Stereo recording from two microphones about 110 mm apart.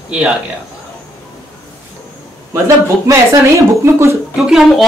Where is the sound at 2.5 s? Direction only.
25° right (ahead or behind).